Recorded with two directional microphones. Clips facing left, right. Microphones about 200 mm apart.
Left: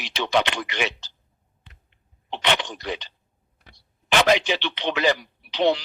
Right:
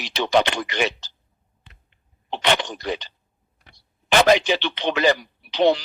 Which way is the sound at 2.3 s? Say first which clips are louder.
Right 3 dB; 40° right (ahead or behind).